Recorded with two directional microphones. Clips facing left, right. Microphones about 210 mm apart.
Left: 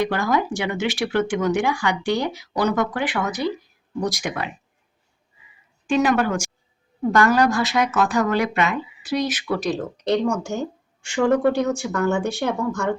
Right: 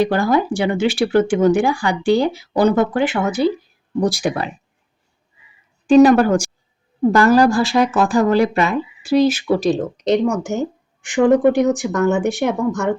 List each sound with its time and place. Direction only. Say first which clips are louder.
0.0 s speech: right 5 dB; 30° right (ahead or behind)
5.9 s a woman's voice: right 9 dB; 35° right (ahead or behind); by 13.0 s 20° right (ahead or behind)